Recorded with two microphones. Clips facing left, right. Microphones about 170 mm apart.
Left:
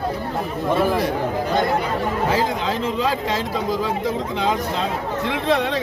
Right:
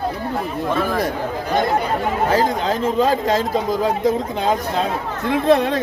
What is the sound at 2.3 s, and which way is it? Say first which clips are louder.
Speech: right 3 dB; 40° right (ahead or behind).